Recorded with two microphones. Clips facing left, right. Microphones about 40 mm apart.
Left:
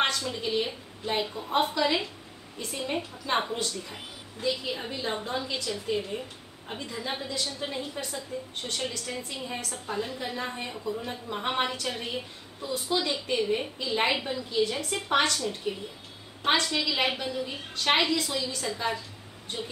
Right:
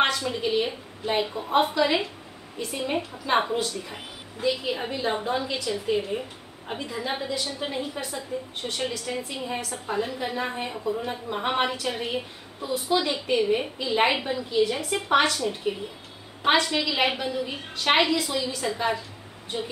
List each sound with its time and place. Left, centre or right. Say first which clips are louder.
0.0 s a woman's voice: right 4 dB; centre